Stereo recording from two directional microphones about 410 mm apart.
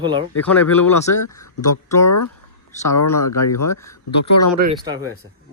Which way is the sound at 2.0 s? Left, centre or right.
Left.